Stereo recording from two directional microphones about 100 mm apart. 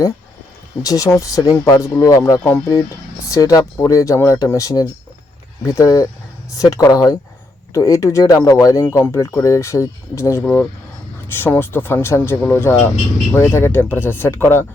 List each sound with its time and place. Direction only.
0.8 s speech: 35° left (ahead or behind)